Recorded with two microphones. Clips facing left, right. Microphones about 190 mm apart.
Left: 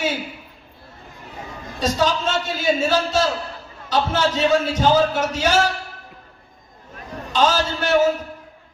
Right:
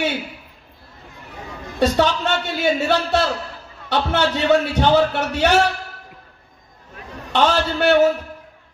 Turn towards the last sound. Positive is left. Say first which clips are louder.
# right 3 dB
turn(degrees=-65)  # may be behind; listen again after turning